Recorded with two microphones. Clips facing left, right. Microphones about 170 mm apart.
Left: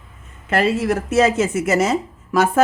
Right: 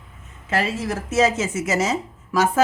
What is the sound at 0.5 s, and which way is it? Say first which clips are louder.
Speech: left 6 dB; 60° left (ahead or behind).